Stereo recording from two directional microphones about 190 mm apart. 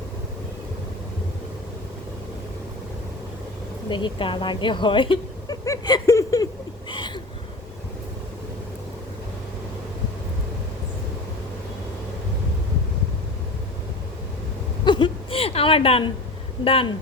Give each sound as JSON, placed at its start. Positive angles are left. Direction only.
{"t": 3.8, "sound": "speech", "side_deg": 25}
{"t": 14.8, "sound": "a sound", "side_deg": 25}
{"t": 16.6, "sound": "speech", "side_deg": 30}